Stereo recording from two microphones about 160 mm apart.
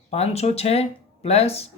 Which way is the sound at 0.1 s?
40° left (ahead or behind).